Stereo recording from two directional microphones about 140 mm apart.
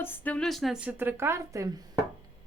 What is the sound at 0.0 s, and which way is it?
A woman's voice, 15° left (ahead or behind).